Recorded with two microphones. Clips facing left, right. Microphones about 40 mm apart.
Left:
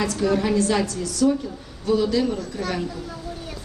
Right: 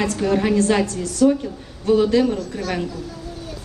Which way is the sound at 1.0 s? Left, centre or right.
Right.